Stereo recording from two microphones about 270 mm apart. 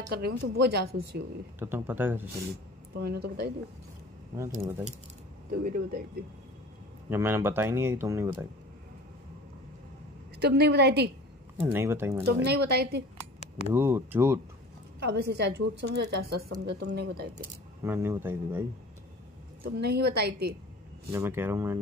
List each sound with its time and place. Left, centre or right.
0.1 s speech: right
1.6 s speech: centre
3.0 s speech: right
5.5 s speech: right
7.1 s speech: centre
10.4 s speech: right
11.6 s speech: centre
12.4 s speech: right
13.7 s speech: centre
15.0 s speech: right
17.8 s speech: centre
19.6 s speech: right
21.1 s speech: centre